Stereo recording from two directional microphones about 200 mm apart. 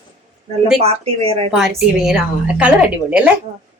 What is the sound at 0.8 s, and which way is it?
Speech, 30° right (ahead or behind).